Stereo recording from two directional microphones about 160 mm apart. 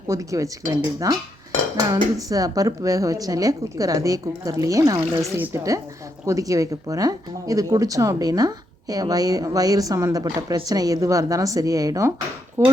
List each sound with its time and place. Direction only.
0.1 s speech: 20° right (ahead or behind)
2.1 s speech: 20° right (ahead or behind)